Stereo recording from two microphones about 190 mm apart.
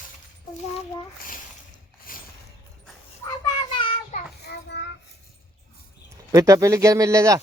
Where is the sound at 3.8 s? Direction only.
25° left (ahead or behind).